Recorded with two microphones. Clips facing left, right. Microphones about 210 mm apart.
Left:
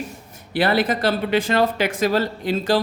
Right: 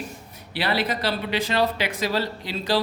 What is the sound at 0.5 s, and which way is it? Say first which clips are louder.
Speech: left 6 dB; 50° left (ahead or behind).